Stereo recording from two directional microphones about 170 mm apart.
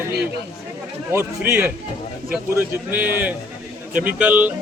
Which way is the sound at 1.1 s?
10° right (ahead or behind).